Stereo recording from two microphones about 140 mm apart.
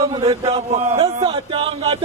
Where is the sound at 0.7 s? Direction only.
45° right (ahead or behind).